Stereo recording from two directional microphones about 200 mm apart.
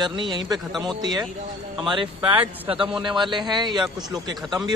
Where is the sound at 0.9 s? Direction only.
20° right (ahead or behind).